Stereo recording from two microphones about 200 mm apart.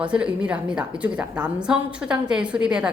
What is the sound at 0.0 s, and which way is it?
A woman's voice, 5° right (ahead or behind).